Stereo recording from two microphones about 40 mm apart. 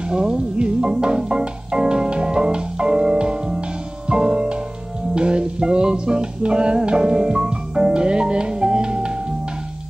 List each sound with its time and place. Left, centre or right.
0.1 s music: right